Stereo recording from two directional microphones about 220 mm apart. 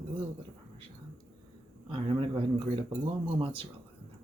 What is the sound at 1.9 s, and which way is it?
Speech, 20° right (ahead or behind).